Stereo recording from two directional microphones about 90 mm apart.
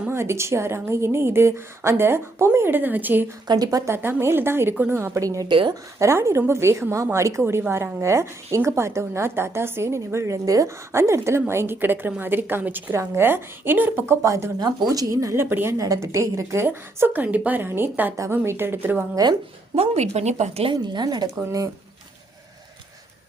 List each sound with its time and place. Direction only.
0.1 s a woman's voice: 30° right (ahead or behind)
3.4 s a woman's voice: 50° right (ahead or behind)
3.9 s a woman's voice: 25° right (ahead or behind)
5.2 s a woman's voice: 40° right (ahead or behind)
5.5 s speech: 60° right (ahead or behind)
6.0 s a woman's voice: 30° right (ahead or behind)
14.2 s a woman's voice: 30° right (ahead or behind)
14.6 s a woman's voice: 45° right (ahead or behind)
15.4 s a woman's voice: 20° right (ahead or behind)
15.8 s a woman's voice: 35° right (ahead or behind)
16.6 s a woman's voice: 20° right (ahead or behind)
19.1 s a woman's voice: 50° right (ahead or behind)
20.7 s a woman's voice: 55° right (ahead or behind)